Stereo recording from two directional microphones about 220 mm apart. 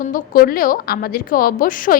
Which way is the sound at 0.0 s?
40° left (ahead or behind).